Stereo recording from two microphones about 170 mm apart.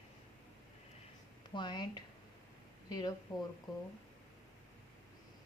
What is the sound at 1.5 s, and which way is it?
A woman's voice, 25° left (ahead or behind).